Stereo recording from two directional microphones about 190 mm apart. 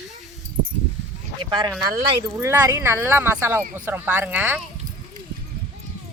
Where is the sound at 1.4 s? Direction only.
25° right (ahead or behind).